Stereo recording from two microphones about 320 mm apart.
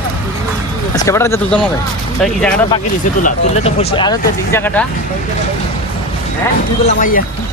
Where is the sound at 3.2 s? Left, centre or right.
Left; by 4.9 s centre.